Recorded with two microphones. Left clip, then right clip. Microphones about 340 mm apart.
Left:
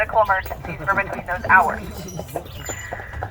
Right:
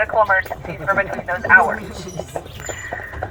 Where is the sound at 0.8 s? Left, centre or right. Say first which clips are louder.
Right 2 dB; left.